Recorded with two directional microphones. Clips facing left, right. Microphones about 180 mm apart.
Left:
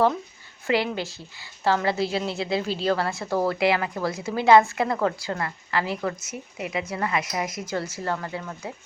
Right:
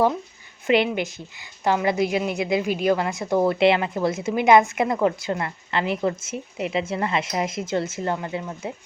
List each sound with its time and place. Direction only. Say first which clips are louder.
0.7 s a woman's voice: right 4 dB; 20° right (ahead or behind)